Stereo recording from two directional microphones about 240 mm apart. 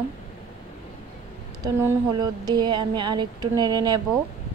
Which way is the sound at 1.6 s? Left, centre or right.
Centre.